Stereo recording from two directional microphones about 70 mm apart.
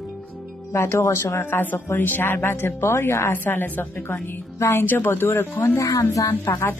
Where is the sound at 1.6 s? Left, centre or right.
Left.